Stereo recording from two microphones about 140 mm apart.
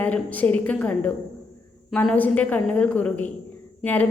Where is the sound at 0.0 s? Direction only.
10° left (ahead or behind).